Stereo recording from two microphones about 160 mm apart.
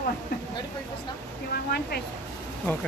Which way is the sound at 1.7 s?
80° left.